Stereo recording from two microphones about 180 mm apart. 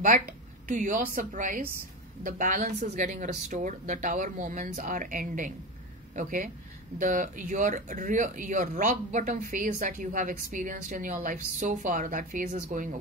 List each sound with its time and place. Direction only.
0.7 s speech: 45° right (ahead or behind)